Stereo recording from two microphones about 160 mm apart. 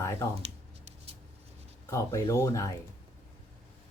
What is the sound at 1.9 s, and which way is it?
Speech, 20° left (ahead or behind).